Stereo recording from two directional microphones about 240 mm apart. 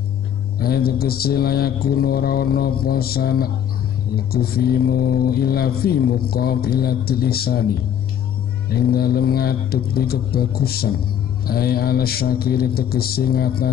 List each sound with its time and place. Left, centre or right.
0.6 s speech: left
8.7 s speech: left